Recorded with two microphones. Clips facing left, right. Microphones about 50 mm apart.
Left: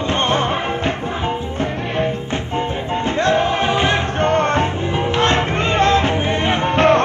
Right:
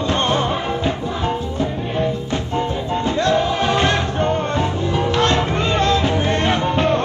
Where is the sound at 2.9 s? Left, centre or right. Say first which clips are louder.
Left 1 dB; left.